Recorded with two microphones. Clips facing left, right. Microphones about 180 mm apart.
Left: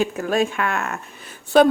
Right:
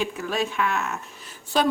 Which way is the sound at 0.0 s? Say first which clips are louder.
Left 6 dB; 50° left (ahead or behind).